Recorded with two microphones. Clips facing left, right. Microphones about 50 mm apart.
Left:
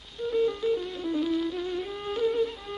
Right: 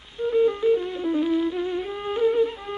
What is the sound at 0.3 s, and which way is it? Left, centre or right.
Music, right.